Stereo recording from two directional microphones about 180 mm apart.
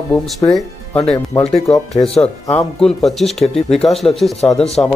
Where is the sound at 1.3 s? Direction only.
20° left (ahead or behind).